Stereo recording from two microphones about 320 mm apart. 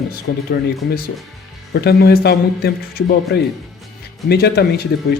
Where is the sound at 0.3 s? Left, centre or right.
Left.